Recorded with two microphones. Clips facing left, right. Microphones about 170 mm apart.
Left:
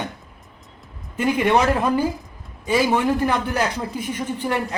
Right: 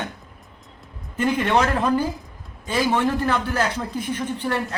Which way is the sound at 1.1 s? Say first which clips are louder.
Left 2 dB; 10° left (ahead or behind).